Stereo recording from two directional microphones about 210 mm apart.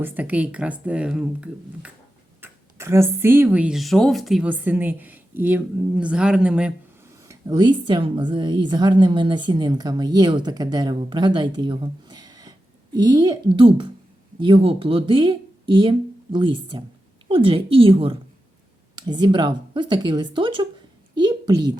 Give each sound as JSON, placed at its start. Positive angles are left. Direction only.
{"t": 0.0, "sound": "speech", "side_deg": -10}
{"t": 7.3, "sound": "speech", "side_deg": -15}
{"t": 21.2, "sound": "a sound", "side_deg": -20}